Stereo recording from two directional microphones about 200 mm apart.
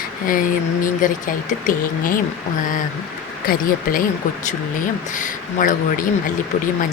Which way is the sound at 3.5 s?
45° left (ahead or behind).